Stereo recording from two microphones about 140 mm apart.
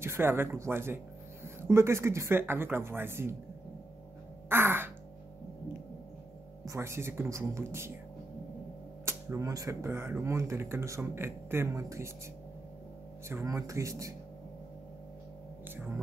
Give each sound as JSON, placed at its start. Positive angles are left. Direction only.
{"t": 0.0, "sound": "speech", "side_deg": -15}
{"t": 4.5, "sound": "music", "side_deg": -15}
{"t": 6.6, "sound": "speech", "side_deg": -20}
{"t": 9.0, "sound": "speech", "side_deg": -20}
{"t": 13.3, "sound": "speech", "side_deg": -20}